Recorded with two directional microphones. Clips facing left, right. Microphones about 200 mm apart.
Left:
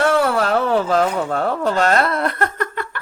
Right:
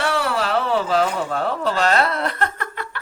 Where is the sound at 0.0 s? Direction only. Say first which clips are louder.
Left 5 dB; 50° left (ahead or behind).